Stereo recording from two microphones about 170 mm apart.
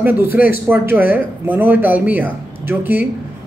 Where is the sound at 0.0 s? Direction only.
10° right (ahead or behind).